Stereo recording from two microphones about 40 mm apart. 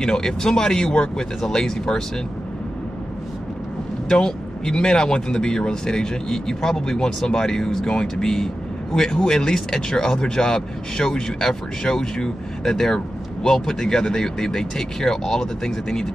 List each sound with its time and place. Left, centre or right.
0.0 s speech: centre
4.1 s speech: centre